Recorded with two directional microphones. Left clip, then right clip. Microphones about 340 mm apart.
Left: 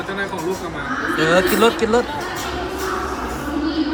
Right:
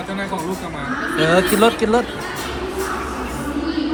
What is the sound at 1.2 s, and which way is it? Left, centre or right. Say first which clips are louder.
Speech: right 1 dB; centre.